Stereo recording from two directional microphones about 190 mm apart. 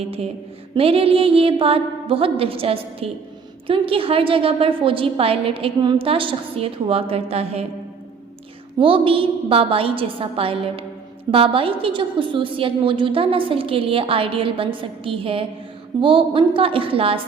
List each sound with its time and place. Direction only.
0.8 s a woman's voice: 30° right (ahead or behind)
8.8 s a woman's voice: 30° right (ahead or behind)